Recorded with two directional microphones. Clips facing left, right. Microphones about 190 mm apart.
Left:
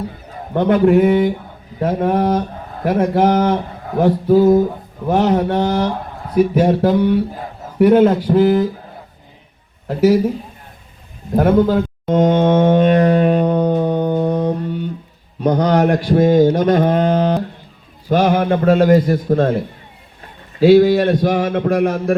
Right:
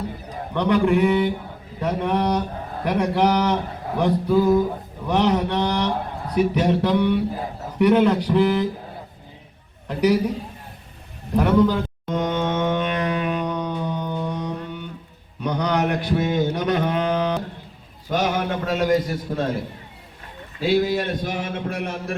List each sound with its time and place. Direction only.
0.5 s a man's voice: 45° left (ahead or behind)
3.9 s a sound: 40° left (ahead or behind)
5.0 s a man's voice: 45° left (ahead or behind)
9.8 s a man's voice: 40° left (ahead or behind)
11.3 s music: 45° left (ahead or behind)
15.4 s a sound: 45° left (ahead or behind)
15.8 s a sound: 35° left (ahead or behind)
16.1 s speech: 45° left (ahead or behind)
18.1 s a man's voice: 55° left (ahead or behind)
20.6 s a man's voice: 45° left (ahead or behind)